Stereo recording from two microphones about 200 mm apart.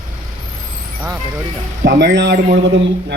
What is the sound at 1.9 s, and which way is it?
Speech, 60° right (ahead or behind).